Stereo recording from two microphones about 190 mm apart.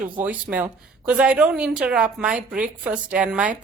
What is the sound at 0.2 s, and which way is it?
A woman's voice, 10° right (ahead or behind).